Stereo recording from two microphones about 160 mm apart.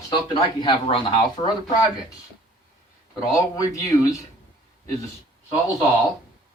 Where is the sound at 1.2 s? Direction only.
25° left (ahead or behind).